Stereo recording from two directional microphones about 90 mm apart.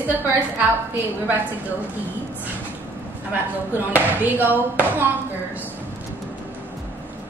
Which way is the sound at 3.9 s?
20° right (ahead or behind).